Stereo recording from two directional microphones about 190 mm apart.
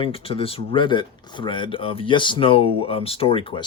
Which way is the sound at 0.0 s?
30° left (ahead or behind).